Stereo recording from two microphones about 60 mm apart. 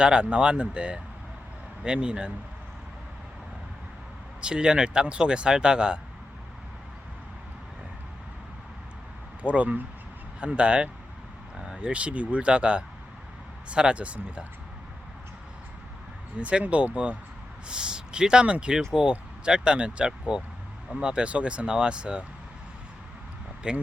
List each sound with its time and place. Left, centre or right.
0.0 s speech: centre
4.4 s speech: centre
9.4 s speech: right
16.4 s speech: centre
23.6 s speech: centre